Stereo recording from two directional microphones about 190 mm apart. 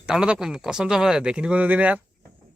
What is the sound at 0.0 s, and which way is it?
Speech, 5° right (ahead or behind).